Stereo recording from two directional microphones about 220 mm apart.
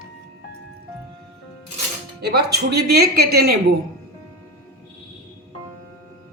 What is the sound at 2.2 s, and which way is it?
Speech, 45° right (ahead or behind).